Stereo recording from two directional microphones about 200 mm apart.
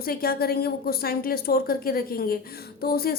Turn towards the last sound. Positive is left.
turn(degrees=50)  # may be behind; listen again after turning